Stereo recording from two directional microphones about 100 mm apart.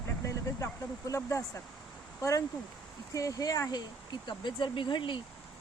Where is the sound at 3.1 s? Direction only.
35° left (ahead or behind).